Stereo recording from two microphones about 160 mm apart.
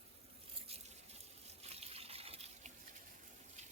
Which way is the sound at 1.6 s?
40° right (ahead or behind).